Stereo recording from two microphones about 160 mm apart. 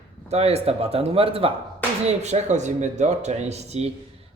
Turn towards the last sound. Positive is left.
turn(degrees=-40)  # may be behind; listen again after turning